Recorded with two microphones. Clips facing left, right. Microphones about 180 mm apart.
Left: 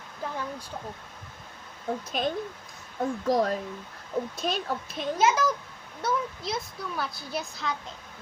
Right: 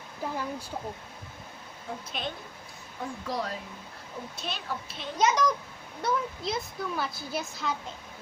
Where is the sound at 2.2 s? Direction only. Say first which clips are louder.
Left 8 dB; 45° left (ahead or behind).